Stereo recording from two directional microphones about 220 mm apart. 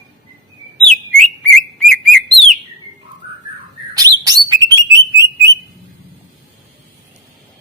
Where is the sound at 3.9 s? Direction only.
15° right (ahead or behind).